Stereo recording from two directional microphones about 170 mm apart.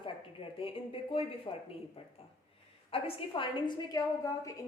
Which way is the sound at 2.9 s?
30° left (ahead or behind).